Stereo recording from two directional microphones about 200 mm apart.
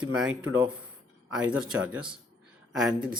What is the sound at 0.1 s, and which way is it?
A man's voice, 5° right (ahead or behind).